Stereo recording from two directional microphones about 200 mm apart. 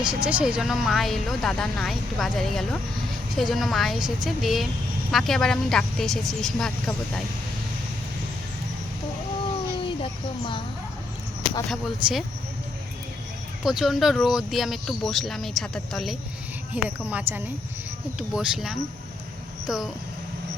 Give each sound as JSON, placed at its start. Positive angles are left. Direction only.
{"t": 0.3, "sound": "speech", "side_deg": -5}
{"t": 9.8, "sound": "a sound", "side_deg": 25}
{"t": 11.7, "sound": "speech", "side_deg": 0}
{"t": 13.7, "sound": "speech", "side_deg": 0}